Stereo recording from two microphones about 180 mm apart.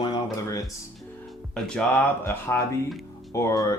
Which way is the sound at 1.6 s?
5° left (ahead or behind).